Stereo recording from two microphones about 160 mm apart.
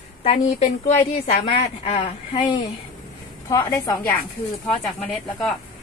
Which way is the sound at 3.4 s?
20° left (ahead or behind).